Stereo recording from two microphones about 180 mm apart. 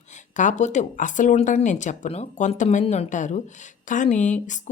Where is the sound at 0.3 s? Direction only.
40° left (ahead or behind).